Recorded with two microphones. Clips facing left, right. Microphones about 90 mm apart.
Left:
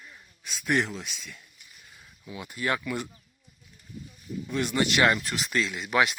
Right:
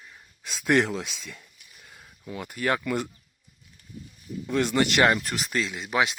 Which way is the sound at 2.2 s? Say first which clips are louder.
Right 3 dB; 45° right (ahead or behind).